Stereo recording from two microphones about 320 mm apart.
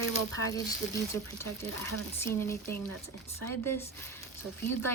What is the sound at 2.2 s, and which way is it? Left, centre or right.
A woman's voice, centre.